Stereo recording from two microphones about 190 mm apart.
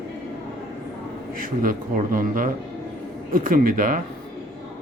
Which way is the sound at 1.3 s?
45° right (ahead or behind).